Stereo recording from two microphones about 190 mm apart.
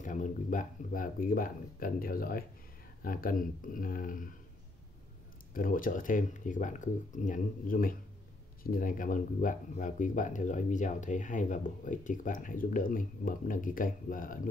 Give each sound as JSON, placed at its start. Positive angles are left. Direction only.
{"t": 0.0, "sound": "speech", "side_deg": 40}
{"t": 5.5, "sound": "speech", "side_deg": 45}